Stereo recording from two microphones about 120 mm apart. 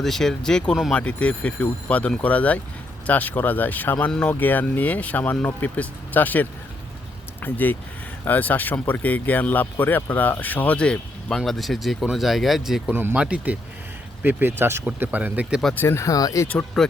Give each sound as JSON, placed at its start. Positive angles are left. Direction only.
{"t": 0.0, "sound": "speech", "side_deg": 5}
{"t": 12.9, "sound": "speech", "side_deg": -20}
{"t": 15.8, "sound": "speech", "side_deg": 20}
{"t": 16.8, "sound": "speech", "side_deg": 0}